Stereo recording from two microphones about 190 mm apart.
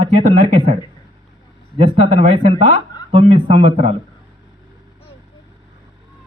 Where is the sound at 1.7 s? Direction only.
25° right (ahead or behind).